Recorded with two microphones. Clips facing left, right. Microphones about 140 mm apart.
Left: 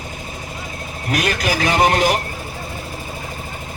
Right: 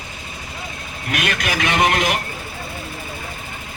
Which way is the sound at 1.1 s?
35° left (ahead or behind).